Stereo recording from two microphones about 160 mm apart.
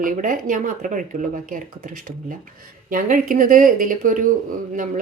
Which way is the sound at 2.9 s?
60° right (ahead or behind).